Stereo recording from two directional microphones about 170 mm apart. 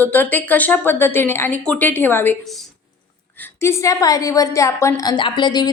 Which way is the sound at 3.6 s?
15° left (ahead or behind).